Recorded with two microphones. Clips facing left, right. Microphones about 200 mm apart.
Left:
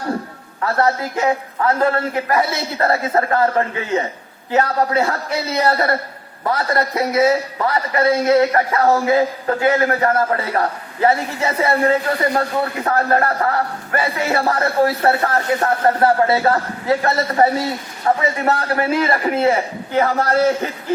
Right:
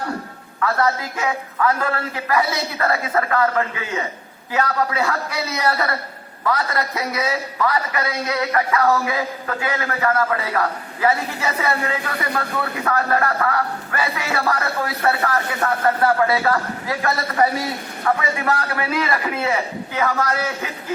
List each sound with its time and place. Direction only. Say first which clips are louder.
0.6 s a man's voice: left 2 dB; 30° left (ahead or behind)